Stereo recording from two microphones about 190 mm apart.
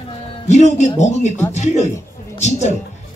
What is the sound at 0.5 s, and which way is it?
Speech, 40° left (ahead or behind).